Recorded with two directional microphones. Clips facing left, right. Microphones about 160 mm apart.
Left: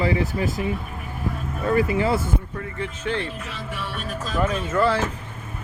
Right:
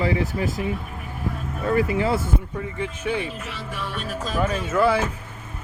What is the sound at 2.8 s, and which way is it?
Speech, 10° right (ahead or behind).